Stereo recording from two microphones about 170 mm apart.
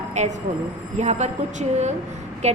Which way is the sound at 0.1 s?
45° right (ahead or behind).